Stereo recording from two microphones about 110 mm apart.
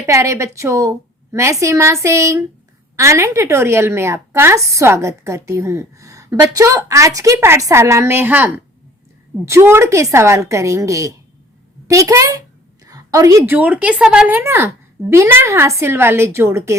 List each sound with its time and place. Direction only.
0.0 s a woman's voice: 25° right (ahead or behind)
12.8 s a sound: 30° right (ahead or behind)
13.4 s a woman's voice: 15° right (ahead or behind)